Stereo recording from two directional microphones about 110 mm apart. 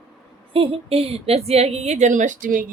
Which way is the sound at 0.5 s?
60° right (ahead or behind).